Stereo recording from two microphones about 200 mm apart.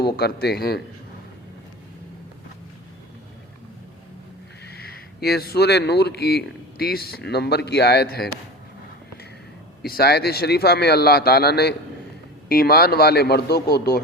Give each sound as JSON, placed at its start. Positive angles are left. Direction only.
{"t": 0.0, "sound": "a man's voice", "side_deg": 55}
{"t": 4.6, "sound": "a man's voice", "side_deg": 50}
{"t": 9.8, "sound": "a man's voice", "side_deg": 50}